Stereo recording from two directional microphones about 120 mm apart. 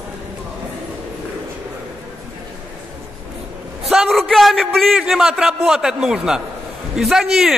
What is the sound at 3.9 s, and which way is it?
A man's voice, centre (ahead or behind).